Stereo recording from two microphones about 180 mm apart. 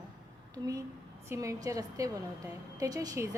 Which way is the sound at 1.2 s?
15° right (ahead or behind).